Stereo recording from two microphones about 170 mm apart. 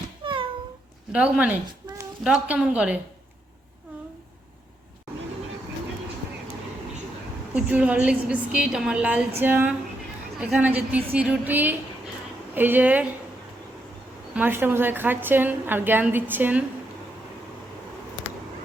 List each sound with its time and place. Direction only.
0.2 s a sound: 30° right (ahead or behind)
1.1 s a woman's voice: 5° right (ahead or behind)
7.5 s a woman's voice: 10° right (ahead or behind)
14.3 s a woman's voice: 10° right (ahead or behind)